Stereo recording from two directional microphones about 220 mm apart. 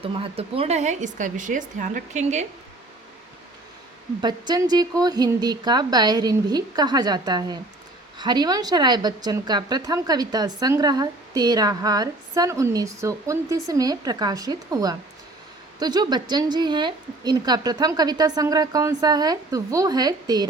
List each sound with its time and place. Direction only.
0.0 s speech: 25° right (ahead or behind)
4.2 s speech: 20° right (ahead or behind)